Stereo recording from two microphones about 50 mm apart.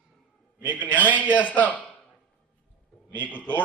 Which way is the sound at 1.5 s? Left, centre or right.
Left.